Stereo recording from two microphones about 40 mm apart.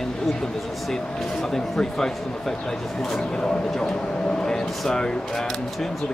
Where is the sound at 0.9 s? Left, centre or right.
Centre.